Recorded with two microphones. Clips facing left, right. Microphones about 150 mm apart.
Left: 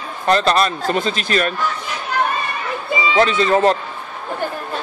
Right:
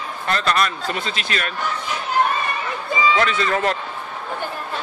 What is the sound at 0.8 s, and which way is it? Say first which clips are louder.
Speech: left 6 dB; 40° left (ahead or behind).